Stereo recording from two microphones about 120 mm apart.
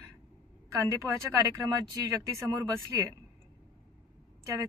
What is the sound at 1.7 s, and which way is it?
Speech, 30° right (ahead or behind).